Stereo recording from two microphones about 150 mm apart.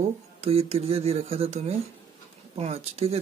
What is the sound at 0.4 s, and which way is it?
Speech, 45° right (ahead or behind).